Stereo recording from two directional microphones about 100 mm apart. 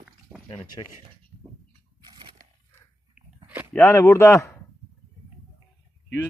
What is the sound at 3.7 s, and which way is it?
Speech, 20° left (ahead or behind).